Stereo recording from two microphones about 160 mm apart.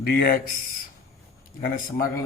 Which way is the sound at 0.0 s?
65° left (ahead or behind).